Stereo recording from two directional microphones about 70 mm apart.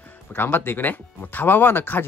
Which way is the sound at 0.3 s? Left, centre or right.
Left.